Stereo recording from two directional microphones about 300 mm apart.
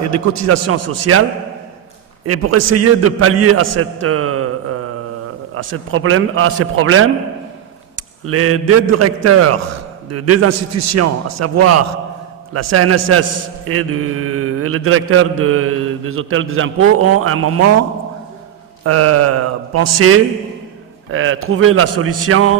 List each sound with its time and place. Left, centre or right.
0.1 s a man's voice: right
2.2 s mantra: right
3.7 s speech: right
5.5 s mantra: right
8.3 s mantra: right
12.5 s a man's voice: right
13.7 s mantra: right
18.9 s mantra: right
21.1 s mantra: right